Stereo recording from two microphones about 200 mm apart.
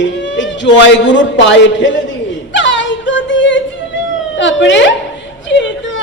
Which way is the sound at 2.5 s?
65° left (ahead or behind).